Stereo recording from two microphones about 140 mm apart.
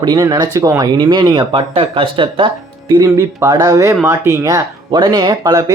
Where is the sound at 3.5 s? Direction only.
30° right (ahead or behind).